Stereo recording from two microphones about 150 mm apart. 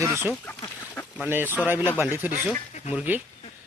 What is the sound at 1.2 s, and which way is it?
Speech, 15° right (ahead or behind).